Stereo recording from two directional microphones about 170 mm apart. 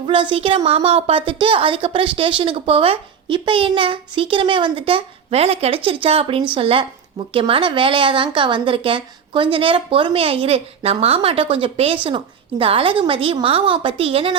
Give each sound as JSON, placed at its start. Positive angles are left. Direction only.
{"t": 0.0, "sound": "a woman's voice", "side_deg": -30}